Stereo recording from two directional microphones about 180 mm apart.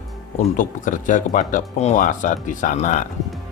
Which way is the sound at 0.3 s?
45° left (ahead or behind).